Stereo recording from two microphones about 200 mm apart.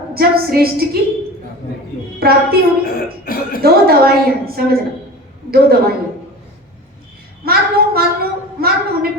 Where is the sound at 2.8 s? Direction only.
45° left (ahead or behind).